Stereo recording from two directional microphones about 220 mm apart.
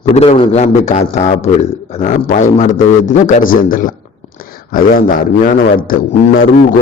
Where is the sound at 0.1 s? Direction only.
30° left (ahead or behind).